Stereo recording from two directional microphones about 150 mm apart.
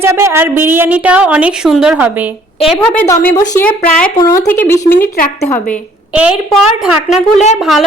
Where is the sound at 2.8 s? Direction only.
10° left (ahead or behind).